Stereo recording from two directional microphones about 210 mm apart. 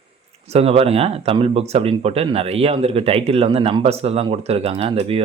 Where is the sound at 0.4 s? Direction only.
30° right (ahead or behind).